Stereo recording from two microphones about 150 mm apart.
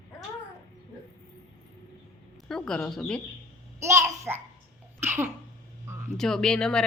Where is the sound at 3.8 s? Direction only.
20° right (ahead or behind).